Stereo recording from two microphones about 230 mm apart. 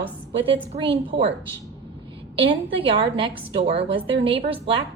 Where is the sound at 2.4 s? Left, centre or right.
Right.